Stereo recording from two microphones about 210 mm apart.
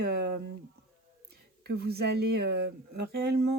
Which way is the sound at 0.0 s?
50° right (ahead or behind).